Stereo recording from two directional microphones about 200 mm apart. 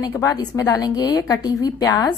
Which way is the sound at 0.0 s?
15° left (ahead or behind).